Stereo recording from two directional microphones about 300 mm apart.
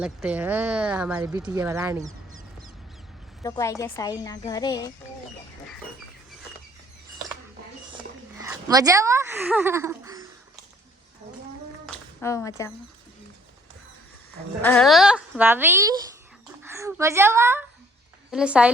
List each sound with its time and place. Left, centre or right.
0.0 s speech: centre
3.4 s speech: centre
8.4 s speech: centre
11.9 s a sound: centre
14.6 s a woman's voice: centre